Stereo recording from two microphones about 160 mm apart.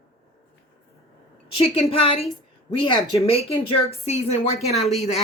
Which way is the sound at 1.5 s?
35° left (ahead or behind).